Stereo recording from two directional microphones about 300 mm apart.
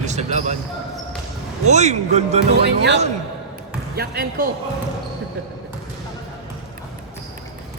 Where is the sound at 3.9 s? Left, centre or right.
Right.